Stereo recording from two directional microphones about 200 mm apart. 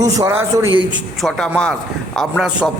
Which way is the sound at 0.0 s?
15° right (ahead or behind).